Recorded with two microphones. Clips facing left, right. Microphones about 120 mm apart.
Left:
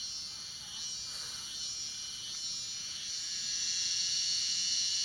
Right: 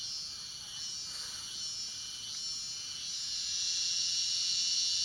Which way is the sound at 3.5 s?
20° right (ahead or behind).